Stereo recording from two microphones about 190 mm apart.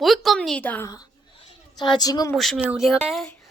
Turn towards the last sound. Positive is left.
turn(degrees=0)  # may be behind; listen again after turning